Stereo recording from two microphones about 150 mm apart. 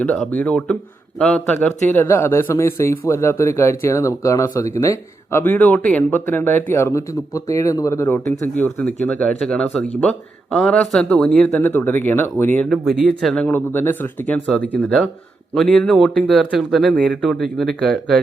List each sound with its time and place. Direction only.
0.3 s speech: 10° left (ahead or behind)